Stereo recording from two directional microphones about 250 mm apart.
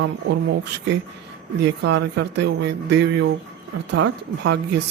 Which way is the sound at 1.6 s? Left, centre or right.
Right.